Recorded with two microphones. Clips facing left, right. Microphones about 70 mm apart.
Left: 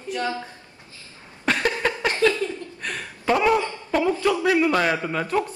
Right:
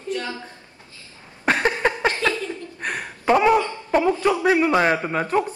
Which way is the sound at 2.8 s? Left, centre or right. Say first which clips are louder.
Right 3 dB; right.